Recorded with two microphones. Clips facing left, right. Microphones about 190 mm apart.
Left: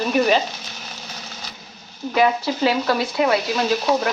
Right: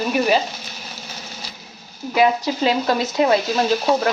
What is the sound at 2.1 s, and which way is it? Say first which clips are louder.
Speech: right 1 dB; 15° right (ahead or behind).